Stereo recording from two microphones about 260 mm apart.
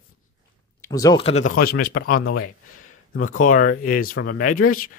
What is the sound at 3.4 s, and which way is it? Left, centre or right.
Speech, left.